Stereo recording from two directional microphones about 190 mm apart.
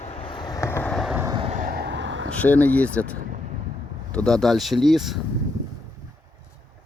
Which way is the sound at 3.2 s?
45° right (ahead or behind).